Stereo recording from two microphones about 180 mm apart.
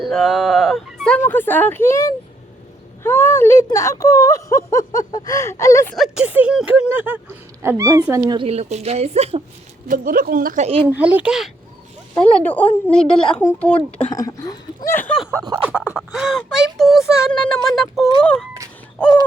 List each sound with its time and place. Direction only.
0.0 s speech: centre (ahead or behind); by 5.9 s 15° left (ahead or behind)
5.9 s speech: centre (ahead or behind)
8.3 s speech: 30° right (ahead or behind)
9.9 s speech: 50° right (ahead or behind)
10.8 s speech: 10° right (ahead or behind)
12.2 s speech: 10° left (ahead or behind)
13.1 s speech: 30° left (ahead or behind)
13.4 s speech: 10° left (ahead or behind)
13.7 s speech: 30° left (ahead or behind)
14.2 s speech: 20° left (ahead or behind)
14.9 s speech: 10° left (ahead or behind)
15.3 s a sound: 20° right (ahead or behind)
15.6 s speech: 10° right (ahead or behind)